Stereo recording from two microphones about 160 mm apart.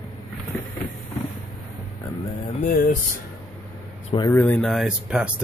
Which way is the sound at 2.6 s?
60° left (ahead or behind).